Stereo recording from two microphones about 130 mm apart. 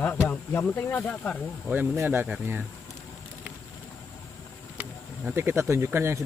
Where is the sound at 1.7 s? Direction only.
15° right (ahead or behind).